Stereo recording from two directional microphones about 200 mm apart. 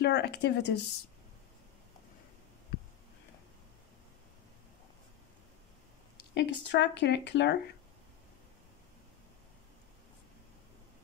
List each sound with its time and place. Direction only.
0.0 s speech: 55° left (ahead or behind)
6.3 s speech: 60° left (ahead or behind)